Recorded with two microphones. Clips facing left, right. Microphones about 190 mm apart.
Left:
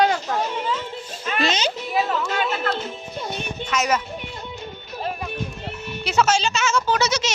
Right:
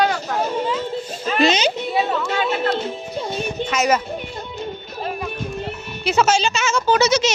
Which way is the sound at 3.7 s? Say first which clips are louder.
Right 3 dB; 10° right (ahead or behind).